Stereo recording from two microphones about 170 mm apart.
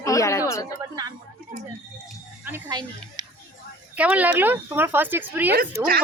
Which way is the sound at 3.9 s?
10° right (ahead or behind).